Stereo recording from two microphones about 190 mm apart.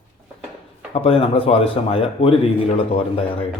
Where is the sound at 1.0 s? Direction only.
30° left (ahead or behind).